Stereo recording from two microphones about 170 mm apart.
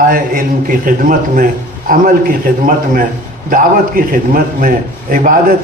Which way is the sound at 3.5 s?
55° right (ahead or behind).